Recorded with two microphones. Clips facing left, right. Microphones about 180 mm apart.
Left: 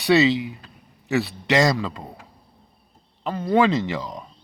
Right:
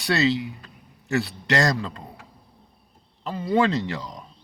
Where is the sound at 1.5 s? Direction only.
80° left.